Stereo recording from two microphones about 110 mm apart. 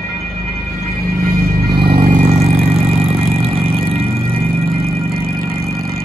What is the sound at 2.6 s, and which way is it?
Vehicle, 60° right (ahead or behind).